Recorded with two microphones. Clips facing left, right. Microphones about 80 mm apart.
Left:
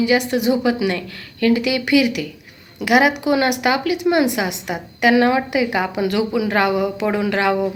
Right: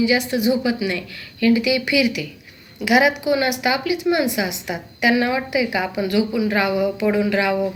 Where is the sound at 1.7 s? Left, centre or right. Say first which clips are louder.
Left 3 dB; left.